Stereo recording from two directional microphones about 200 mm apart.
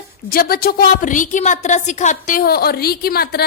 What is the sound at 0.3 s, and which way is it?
A woman's voice, 50° left (ahead or behind).